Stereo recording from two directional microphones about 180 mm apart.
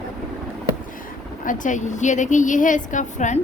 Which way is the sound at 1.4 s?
45° left (ahead or behind).